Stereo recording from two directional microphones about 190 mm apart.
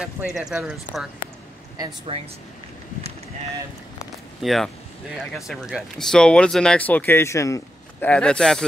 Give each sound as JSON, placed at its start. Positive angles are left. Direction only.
{"t": 0.0, "sound": "speech", "side_deg": -5}
{"t": 2.1, "sound": "speech", "side_deg": -30}
{"t": 4.4, "sound": "speech", "side_deg": 0}